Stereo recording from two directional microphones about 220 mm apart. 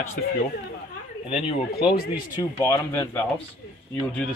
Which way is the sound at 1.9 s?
40° left (ahead or behind).